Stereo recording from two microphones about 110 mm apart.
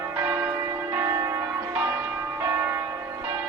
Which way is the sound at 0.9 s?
30° right (ahead or behind).